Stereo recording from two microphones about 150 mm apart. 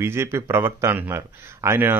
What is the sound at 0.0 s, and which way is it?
A man's voice, 15° right (ahead or behind).